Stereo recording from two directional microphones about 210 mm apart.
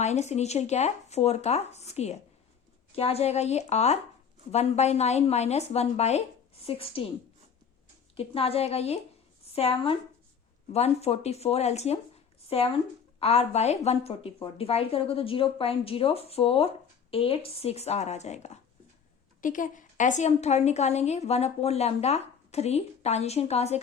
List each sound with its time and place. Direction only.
0.0 s a woman's voice: 30° left (ahead or behind)
8.1 s a woman's voice: 25° left (ahead or behind)